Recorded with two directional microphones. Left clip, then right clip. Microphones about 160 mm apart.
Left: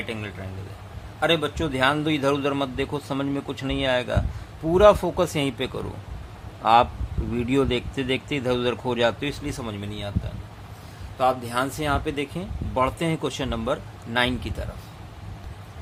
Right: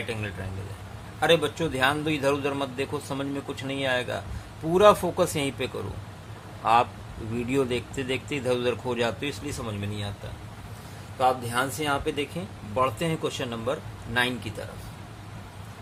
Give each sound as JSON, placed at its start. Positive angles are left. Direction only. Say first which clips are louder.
{"t": 1.2, "sound": "a man's voice", "louder": "even", "side_deg": 20}
{"t": 11.2, "sound": "speech", "louder": "left 1 dB", "side_deg": 30}